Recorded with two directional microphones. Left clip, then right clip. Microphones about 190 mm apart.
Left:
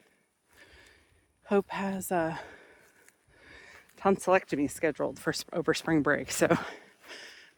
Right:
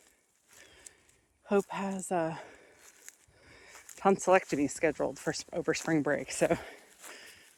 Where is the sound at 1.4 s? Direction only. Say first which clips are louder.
Left 2 dB; 30° left (ahead or behind).